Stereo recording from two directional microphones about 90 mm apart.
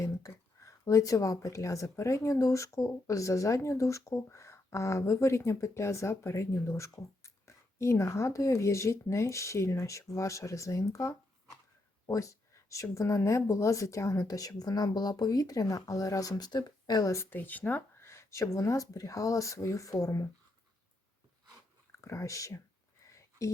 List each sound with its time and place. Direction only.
0.0 s speech: 35° left (ahead or behind)
17.1 s speech: 25° left (ahead or behind)
22.0 s speech: 35° left (ahead or behind)
23.0 s a sound: 35° left (ahead or behind)